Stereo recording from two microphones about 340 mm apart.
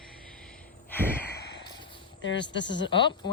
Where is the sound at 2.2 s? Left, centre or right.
Left.